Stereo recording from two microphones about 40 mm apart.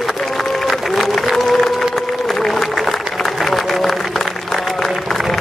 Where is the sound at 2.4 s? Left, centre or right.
Centre.